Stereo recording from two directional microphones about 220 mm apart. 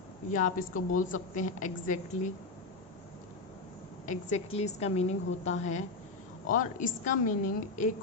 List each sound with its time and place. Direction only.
0.3 s a woman's voice: 35° left (ahead or behind)
4.0 s a woman's voice: 35° left (ahead or behind)